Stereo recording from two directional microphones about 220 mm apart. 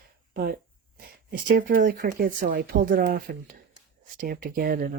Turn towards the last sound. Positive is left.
turn(degrees=-40)  # may be behind; listen again after turning